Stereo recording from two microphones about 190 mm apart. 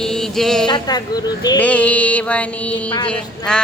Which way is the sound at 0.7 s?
20° left (ahead or behind).